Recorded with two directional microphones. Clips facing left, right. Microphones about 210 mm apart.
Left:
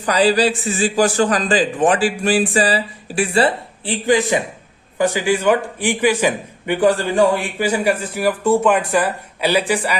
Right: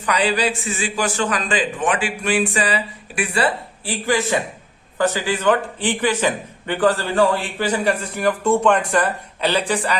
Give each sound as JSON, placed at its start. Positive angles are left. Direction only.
{"t": 0.0, "sound": "a man's voice", "side_deg": 35}